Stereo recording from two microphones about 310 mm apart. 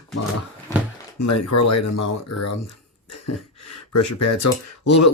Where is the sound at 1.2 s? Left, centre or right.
Left.